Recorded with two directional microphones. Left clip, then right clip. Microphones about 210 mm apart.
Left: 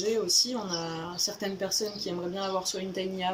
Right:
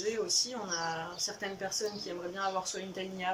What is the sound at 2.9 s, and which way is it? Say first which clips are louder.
Speech: left 4 dB; 15° left (ahead or behind).